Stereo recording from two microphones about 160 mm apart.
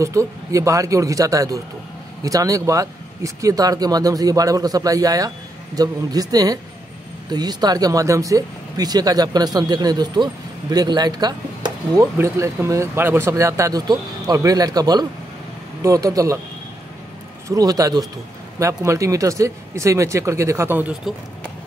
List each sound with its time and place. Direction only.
0.0 s speech: 20° right (ahead or behind)
17.5 s speech: 20° right (ahead or behind)